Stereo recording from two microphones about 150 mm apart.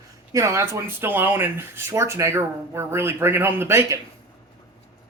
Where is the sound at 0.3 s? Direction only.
20° right (ahead or behind).